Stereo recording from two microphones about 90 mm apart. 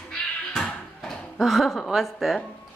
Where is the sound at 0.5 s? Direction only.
5° left (ahead or behind).